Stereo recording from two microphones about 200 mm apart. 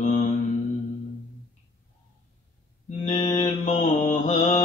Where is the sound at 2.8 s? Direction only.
35° left (ahead or behind).